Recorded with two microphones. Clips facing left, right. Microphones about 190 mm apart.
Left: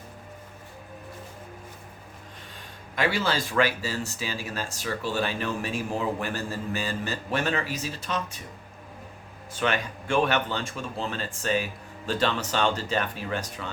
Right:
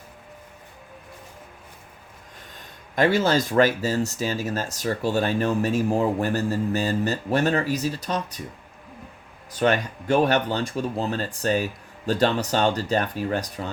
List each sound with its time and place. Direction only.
2.9 s speech: 45° right (ahead or behind)
9.5 s speech: 40° right (ahead or behind)